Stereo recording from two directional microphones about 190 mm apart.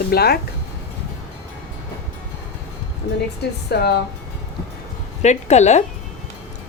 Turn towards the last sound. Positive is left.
turn(degrees=35)  # may be behind; listen again after turning